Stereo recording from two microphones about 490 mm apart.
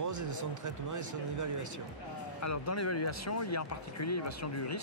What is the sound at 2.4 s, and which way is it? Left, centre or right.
Speech, left.